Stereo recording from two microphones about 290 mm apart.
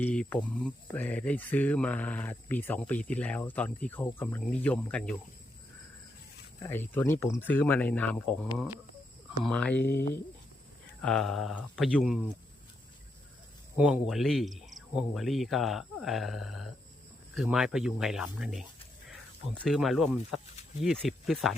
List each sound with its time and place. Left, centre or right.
0.0 s speech: centre
6.6 s speech: centre
11.0 s speech: centre
13.7 s speech: centre
19.6 s speech: centre